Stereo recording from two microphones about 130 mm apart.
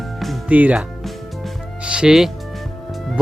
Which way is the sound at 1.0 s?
Centre (ahead or behind).